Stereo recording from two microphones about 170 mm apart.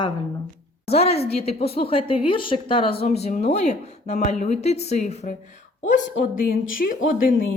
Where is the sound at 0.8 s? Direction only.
35° left (ahead or behind).